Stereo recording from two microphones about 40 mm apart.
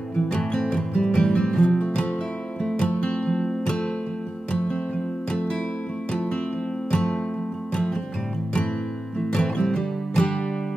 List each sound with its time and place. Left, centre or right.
0.1 s music: left
5.3 s music: left
6.9 s music: left
9.3 s music: left